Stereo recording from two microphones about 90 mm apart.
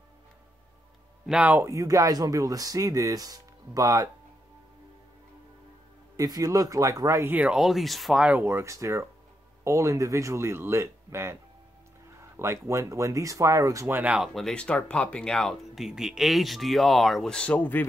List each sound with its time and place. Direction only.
1.6 s speech: 35° right (ahead or behind)
6.1 s speech: 45° right (ahead or behind)
7.2 s speech: 20° right (ahead or behind)
7.5 s speech: 5° right (ahead or behind)
8.3 s speech: 25° right (ahead or behind)
13.8 s speech: 25° right (ahead or behind)
14.3 s speech: 5° left (ahead or behind)